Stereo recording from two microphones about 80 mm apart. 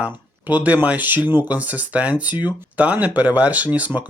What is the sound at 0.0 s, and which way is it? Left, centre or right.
Speech, centre.